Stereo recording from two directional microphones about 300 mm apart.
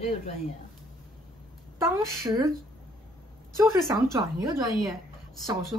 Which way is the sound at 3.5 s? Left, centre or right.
Centre.